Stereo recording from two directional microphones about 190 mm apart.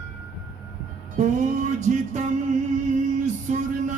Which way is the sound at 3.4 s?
40° right (ahead or behind).